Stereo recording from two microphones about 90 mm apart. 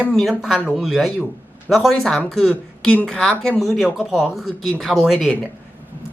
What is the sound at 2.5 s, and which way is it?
A woman's voice, 15° left (ahead or behind).